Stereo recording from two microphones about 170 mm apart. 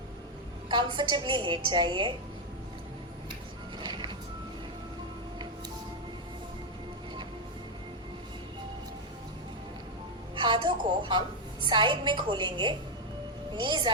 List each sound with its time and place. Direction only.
0.7 s a woman's voice: 25° right (ahead or behind)
3.8 s music: 25° right (ahead or behind)
10.3 s a sound: 25° right (ahead or behind)
11.6 s a woman's voice: 25° right (ahead or behind)